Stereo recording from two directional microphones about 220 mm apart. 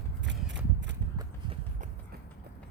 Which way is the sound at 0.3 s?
55° right (ahead or behind).